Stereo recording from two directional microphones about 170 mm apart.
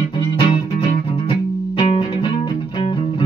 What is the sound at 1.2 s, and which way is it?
Music, 30° left (ahead or behind).